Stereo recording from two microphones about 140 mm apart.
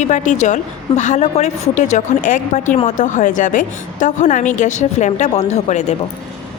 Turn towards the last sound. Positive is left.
turn(degrees=55)  # may be behind; listen again after turning